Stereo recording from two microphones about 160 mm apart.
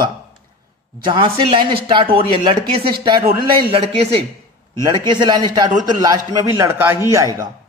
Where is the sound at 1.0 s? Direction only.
30° right (ahead or behind).